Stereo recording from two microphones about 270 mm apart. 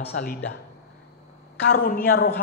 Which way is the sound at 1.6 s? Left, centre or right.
Left.